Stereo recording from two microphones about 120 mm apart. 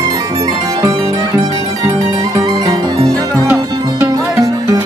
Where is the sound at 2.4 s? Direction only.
30° right (ahead or behind).